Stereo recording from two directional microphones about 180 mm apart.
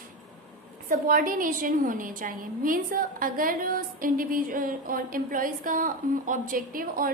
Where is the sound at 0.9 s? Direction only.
50° right (ahead or behind).